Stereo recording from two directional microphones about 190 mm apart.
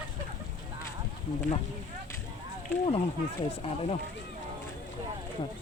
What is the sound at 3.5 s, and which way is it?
Speech, 30° left (ahead or behind).